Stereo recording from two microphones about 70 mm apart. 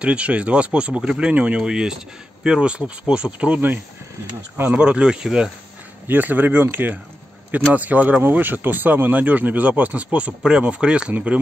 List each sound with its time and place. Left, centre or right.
0.0 s speech: centre
6.0 s speech: right